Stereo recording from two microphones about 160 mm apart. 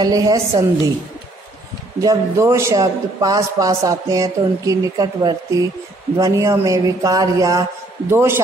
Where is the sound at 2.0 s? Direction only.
20° right (ahead or behind).